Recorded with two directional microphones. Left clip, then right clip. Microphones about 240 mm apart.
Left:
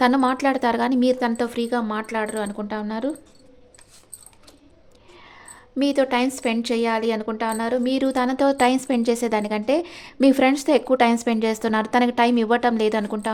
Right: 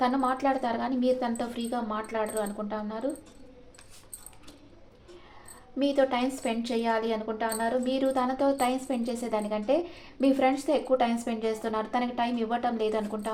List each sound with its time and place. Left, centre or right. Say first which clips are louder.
0.0 s a woman's voice: left 7 dB; left
5.8 s a woman's voice: left 5 dB; left